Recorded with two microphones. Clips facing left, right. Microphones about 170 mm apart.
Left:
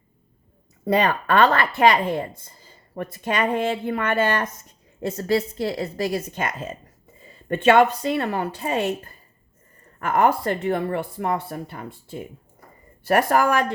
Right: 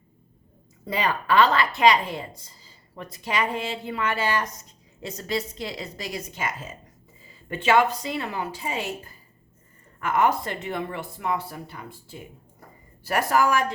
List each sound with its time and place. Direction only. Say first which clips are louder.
0.9 s speech: left 5 dB; 60° left (ahead or behind)